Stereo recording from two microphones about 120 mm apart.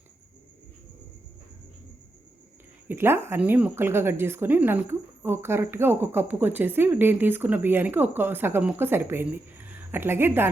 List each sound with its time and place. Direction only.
2.8 s speech: 20° right (ahead or behind)